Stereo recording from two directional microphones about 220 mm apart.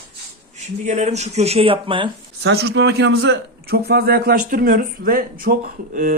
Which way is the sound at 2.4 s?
50° right (ahead or behind).